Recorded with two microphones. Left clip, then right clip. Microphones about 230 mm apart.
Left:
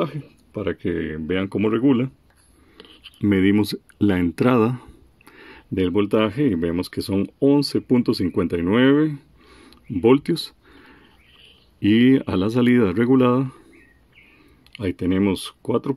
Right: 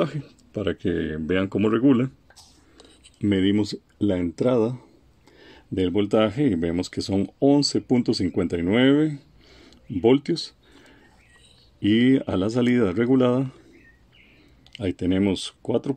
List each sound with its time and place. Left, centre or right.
0.0 s speech: centre
3.2 s speech: left
9.6 s a sound: centre
11.8 s speech: centre
14.7 s speech: centre